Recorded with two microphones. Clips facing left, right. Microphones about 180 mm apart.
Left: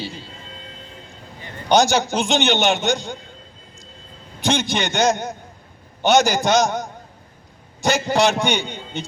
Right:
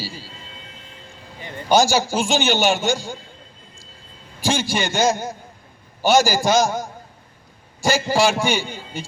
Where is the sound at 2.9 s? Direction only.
20° left (ahead or behind).